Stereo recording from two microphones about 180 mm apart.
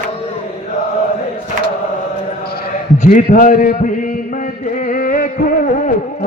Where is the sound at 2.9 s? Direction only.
40° left (ahead or behind).